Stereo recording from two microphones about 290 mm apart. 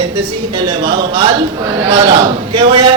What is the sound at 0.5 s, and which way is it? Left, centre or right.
A man's voice, centre.